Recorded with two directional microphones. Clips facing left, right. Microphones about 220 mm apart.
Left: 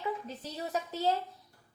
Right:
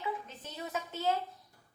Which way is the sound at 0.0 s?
35° left (ahead or behind).